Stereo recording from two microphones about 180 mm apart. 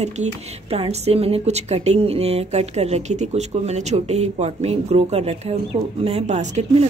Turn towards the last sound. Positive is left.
turn(degrees=-40)  # may be behind; listen again after turning